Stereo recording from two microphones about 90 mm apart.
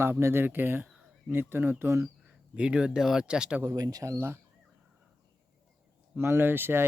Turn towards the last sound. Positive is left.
turn(degrees=-25)  # may be behind; listen again after turning